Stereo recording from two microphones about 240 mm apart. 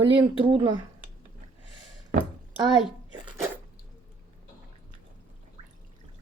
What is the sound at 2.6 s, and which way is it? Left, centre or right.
Speech, centre.